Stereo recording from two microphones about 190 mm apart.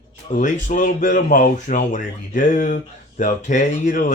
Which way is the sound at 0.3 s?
40° left (ahead or behind).